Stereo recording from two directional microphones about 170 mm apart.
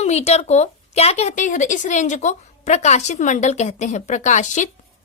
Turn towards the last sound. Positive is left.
turn(degrees=45)  # may be behind; listen again after turning